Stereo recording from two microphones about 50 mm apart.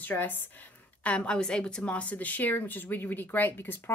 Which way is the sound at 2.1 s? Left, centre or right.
Left.